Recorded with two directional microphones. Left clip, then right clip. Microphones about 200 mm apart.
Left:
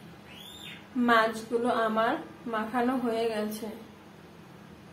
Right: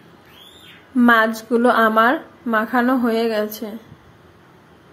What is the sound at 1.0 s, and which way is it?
A woman's voice, 35° right (ahead or behind).